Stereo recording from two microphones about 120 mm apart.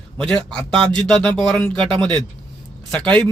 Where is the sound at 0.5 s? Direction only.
45° right (ahead or behind).